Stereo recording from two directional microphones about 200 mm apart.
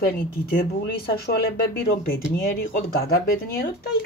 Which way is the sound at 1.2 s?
55° left (ahead or behind).